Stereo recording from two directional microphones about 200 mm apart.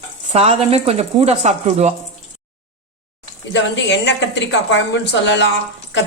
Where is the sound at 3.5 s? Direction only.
60° left (ahead or behind).